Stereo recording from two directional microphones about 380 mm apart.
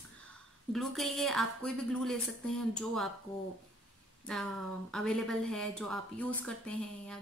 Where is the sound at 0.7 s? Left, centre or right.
Centre.